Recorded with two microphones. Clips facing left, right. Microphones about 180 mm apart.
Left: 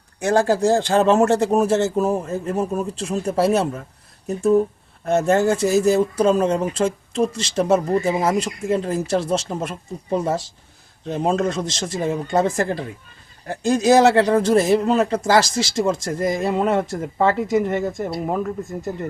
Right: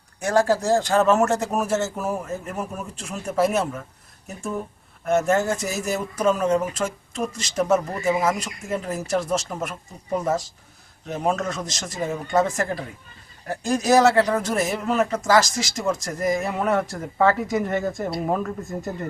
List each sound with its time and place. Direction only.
0.3 s speech: 30° left (ahead or behind)